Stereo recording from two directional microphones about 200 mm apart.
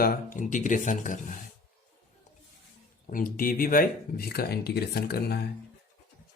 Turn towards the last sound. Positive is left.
turn(degrees=55)  # may be behind; listen again after turning